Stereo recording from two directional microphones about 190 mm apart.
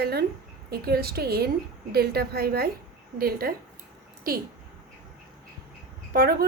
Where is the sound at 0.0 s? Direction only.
55° right (ahead or behind).